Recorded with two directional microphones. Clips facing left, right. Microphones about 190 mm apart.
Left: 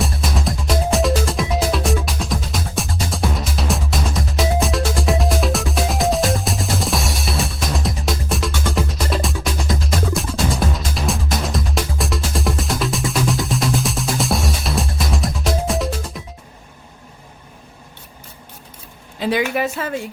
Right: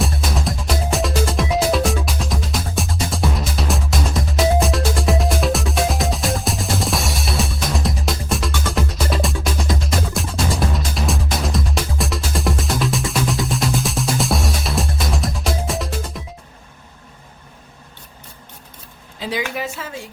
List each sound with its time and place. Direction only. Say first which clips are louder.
0.0 s music: even; centre (ahead or behind)
19.2 s a sound: left 6 dB; 60° left (ahead or behind)
19.5 s a woman's voice: left 6 dB; 55° left (ahead or behind)